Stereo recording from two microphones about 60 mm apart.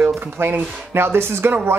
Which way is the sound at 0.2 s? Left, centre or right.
Right.